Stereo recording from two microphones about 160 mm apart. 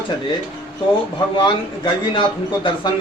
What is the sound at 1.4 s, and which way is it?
A man's voice, 30° left (ahead or behind).